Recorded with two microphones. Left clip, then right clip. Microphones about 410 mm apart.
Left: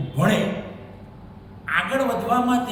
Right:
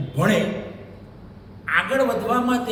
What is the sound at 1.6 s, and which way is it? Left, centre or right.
Speech, centre.